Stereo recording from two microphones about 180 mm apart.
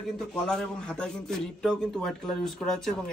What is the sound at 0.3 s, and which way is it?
A man's voice, 5° left (ahead or behind).